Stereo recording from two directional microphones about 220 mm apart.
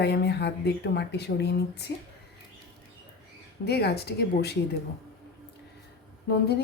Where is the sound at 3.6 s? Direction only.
45° left (ahead or behind).